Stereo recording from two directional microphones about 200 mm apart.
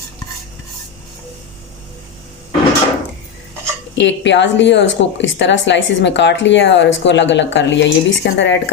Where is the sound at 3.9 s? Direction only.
65° left (ahead or behind).